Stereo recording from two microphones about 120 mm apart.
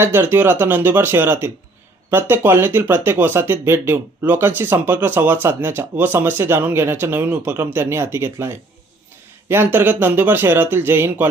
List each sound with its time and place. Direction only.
0.0 s speech: 20° right (ahead or behind)